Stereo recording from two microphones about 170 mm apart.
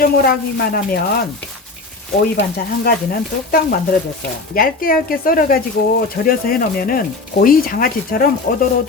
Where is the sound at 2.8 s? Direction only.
60° left (ahead or behind).